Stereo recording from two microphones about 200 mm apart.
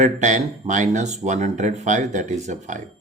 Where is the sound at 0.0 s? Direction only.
35° right (ahead or behind).